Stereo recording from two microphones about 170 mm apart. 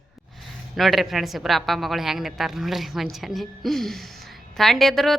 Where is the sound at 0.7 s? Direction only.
Centre (ahead or behind).